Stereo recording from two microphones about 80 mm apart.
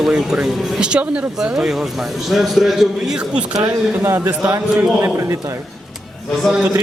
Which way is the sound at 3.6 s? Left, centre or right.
Right.